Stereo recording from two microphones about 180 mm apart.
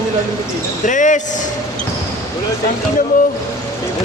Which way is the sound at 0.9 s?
45° left (ahead or behind).